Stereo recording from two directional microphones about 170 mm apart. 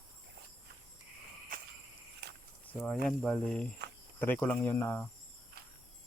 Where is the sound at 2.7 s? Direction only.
5° left (ahead or behind).